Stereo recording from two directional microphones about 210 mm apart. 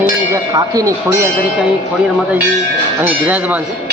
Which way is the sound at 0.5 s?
15° right (ahead or behind).